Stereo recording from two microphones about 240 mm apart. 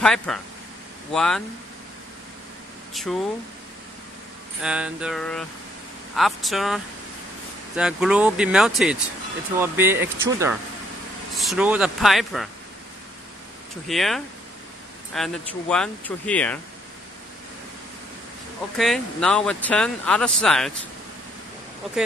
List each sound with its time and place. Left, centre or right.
0.0 s speech: centre
2.9 s speech: centre
4.6 s speech: centre
13.8 s speech: centre
18.8 s speech: centre